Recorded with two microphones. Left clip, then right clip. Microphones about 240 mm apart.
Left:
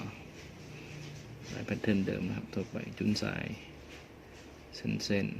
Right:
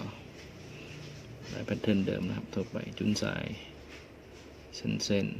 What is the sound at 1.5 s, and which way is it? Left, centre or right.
Speech, centre.